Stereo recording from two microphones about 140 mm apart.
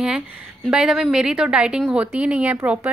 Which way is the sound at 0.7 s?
5° right (ahead or behind).